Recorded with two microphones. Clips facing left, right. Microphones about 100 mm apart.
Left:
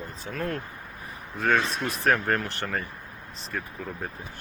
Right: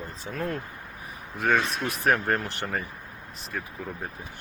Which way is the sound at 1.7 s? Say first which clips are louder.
Even; 10° right (ahead or behind).